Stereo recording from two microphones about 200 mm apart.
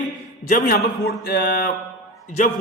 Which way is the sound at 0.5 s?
50° left (ahead or behind).